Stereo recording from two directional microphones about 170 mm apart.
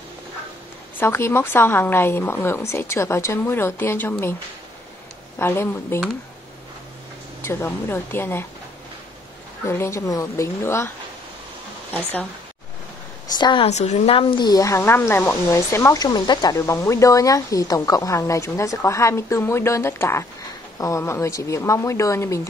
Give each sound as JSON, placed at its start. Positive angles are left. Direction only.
{"t": 0.9, "sound": "speech", "side_deg": 15}
{"t": 5.4, "sound": "speech", "side_deg": 15}
{"t": 7.4, "sound": "speech", "side_deg": 15}
{"t": 9.7, "sound": "speech", "side_deg": 15}
{"t": 11.9, "sound": "speech", "side_deg": 10}
{"t": 13.3, "sound": "a woman's voice", "side_deg": 25}
{"t": 13.7, "sound": "speech", "side_deg": 40}